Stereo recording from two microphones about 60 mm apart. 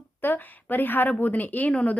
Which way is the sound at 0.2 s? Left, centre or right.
Left.